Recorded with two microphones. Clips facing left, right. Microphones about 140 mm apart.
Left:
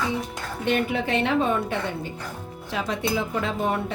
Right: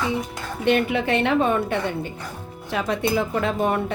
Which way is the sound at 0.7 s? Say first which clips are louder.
Right 4 dB; 70° right (ahead or behind).